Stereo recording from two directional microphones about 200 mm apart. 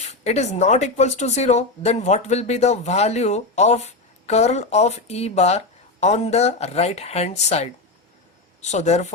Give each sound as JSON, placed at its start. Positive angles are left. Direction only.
{"t": 0.0, "sound": "speech", "side_deg": 35}